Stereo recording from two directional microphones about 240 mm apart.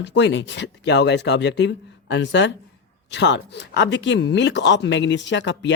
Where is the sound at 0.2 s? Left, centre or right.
Left.